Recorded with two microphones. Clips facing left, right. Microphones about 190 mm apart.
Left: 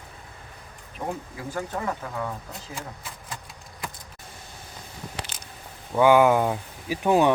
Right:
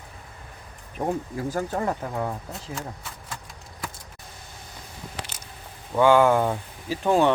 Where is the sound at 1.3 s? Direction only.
40° right (ahead or behind).